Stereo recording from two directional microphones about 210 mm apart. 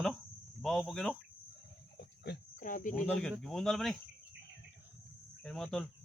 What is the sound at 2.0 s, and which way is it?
Cricket, 50° left (ahead or behind).